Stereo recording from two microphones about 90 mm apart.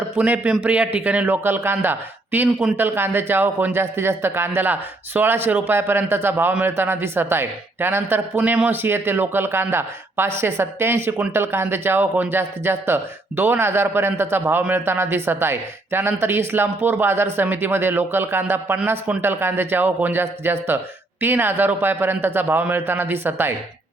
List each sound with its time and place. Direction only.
0.2 s a man's voice: 10° right (ahead or behind)